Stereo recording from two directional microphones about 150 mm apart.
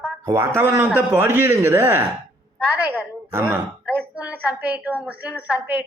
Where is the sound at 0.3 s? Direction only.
20° right (ahead or behind).